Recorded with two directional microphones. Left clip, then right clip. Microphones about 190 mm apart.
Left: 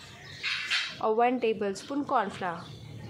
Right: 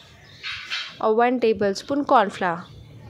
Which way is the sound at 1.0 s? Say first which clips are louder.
Right 8 dB; 30° right (ahead or behind).